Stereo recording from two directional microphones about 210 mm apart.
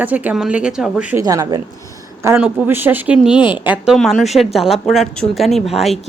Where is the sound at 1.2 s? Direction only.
15° right (ahead or behind).